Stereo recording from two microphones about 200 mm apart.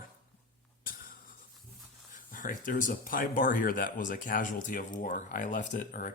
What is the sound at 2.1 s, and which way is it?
Speech, 40° left (ahead or behind).